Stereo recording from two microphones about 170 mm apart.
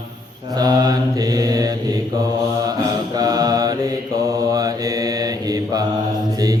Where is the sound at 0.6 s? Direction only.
25° right (ahead or behind).